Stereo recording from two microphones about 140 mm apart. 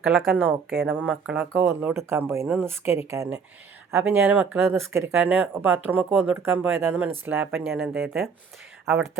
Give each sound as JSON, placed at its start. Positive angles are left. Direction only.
{"t": 0.0, "sound": "a woman's voice", "side_deg": 0}
{"t": 0.3, "sound": "speech", "side_deg": -10}
{"t": 8.1, "sound": "a woman's voice", "side_deg": 0}